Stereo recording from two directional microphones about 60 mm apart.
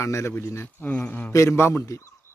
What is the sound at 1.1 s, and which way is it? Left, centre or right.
Speech, left.